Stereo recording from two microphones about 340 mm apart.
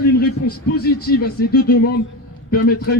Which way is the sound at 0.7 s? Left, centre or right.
Left.